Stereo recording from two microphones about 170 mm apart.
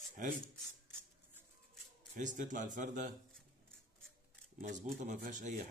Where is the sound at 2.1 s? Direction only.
50° right (ahead or behind).